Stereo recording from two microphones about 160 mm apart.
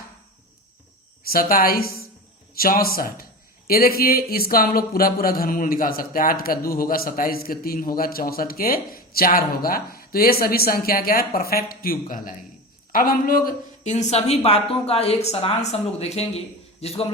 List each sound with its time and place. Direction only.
1.2 s a man's voice: 65° left (ahead or behind)
13.9 s speech: 45° left (ahead or behind)